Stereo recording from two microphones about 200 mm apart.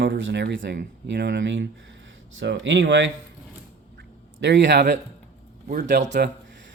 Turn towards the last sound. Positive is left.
turn(degrees=-35)  # may be behind; listen again after turning